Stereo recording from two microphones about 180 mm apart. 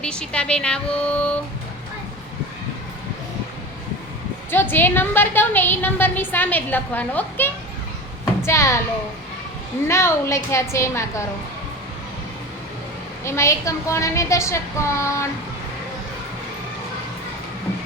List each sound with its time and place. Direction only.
0.0 s speech: 5° left (ahead or behind)
4.5 s a woman's voice: 10° left (ahead or behind)
9.8 s a woman's voice: 15° left (ahead or behind)
13.2 s a woman's voice: 15° left (ahead or behind)